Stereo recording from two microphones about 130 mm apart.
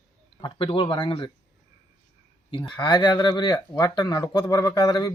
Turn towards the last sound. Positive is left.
turn(degrees=30)  # may be behind; listen again after turning